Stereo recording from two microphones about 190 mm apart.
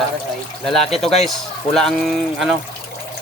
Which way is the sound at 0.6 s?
Centre (ahead or behind).